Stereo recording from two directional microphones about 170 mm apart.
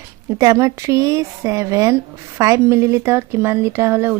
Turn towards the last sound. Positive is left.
turn(degrees=-15)  # may be behind; listen again after turning